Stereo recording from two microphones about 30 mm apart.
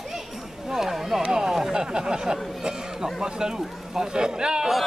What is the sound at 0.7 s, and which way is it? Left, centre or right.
Speech, centre.